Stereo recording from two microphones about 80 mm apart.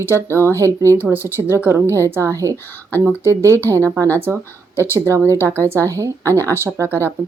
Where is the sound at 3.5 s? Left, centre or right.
Left.